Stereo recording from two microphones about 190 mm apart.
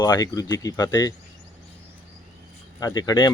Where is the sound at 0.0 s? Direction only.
20° left (ahead or behind).